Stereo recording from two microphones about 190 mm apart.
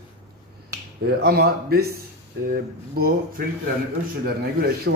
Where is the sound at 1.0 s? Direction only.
55° right (ahead or behind).